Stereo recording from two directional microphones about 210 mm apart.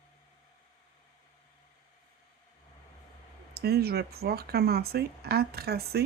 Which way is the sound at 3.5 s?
50° right (ahead or behind).